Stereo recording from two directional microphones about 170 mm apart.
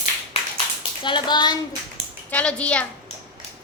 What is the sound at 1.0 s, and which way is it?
Speech, 30° left (ahead or behind).